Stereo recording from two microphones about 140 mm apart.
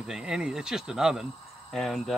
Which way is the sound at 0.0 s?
5° right (ahead or behind).